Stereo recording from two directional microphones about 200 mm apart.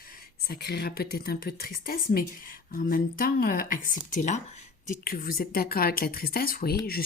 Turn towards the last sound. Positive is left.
turn(degrees=50)  # may be behind; listen again after turning